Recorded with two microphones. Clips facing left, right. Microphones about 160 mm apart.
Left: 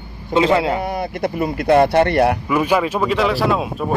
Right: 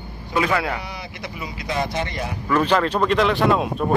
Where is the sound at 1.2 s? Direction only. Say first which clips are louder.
Left 13 dB; 55° left (ahead or behind).